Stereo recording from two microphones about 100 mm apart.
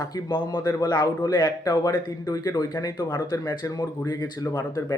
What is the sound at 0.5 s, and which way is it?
A man's voice, 45° left (ahead or behind).